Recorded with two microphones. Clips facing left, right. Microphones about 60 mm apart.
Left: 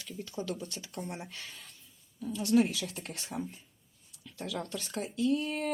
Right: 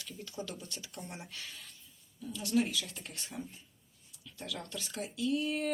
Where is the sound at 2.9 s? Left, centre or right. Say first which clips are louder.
Left 5 dB; left.